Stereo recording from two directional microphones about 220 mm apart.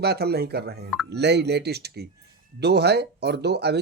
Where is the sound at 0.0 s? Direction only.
45° right (ahead or behind).